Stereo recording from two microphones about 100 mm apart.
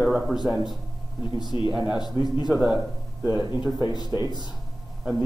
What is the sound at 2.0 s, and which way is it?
Speech, 40° left (ahead or behind).